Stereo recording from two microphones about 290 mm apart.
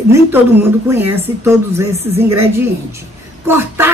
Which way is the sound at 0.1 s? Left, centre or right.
Centre.